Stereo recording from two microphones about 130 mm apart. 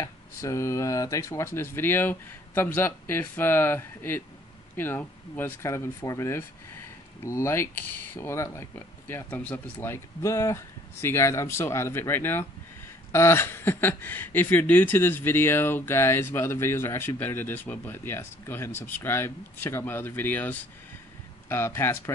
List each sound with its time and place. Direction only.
0.0 s speech: 25° left (ahead or behind)